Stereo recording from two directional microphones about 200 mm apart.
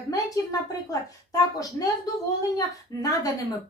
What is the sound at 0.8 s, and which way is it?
A woman's voice, 15° left (ahead or behind).